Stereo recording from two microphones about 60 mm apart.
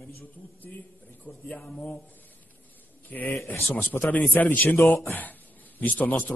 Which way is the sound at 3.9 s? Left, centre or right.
Left.